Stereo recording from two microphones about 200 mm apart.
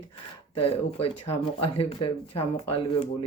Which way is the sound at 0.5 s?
30° left (ahead or behind).